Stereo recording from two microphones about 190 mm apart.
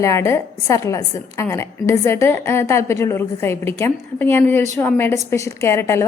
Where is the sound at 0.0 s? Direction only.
15° left (ahead or behind).